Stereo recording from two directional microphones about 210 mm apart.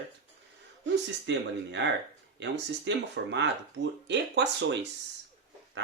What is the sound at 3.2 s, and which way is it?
Speech, 55° right (ahead or behind).